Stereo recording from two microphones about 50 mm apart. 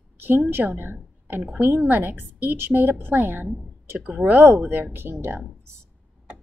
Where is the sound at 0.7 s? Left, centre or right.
Right.